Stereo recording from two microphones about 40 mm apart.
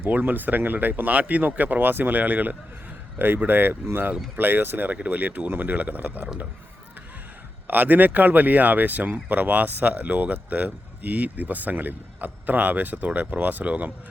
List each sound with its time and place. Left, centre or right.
0.0 s speech: right
3.2 s speech: right
4.9 s speech: right
7.7 s speech: right